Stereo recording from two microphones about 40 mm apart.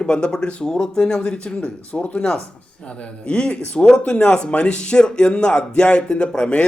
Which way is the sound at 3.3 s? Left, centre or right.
Left.